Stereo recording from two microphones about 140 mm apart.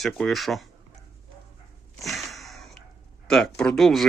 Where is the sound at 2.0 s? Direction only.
Centre (ahead or behind).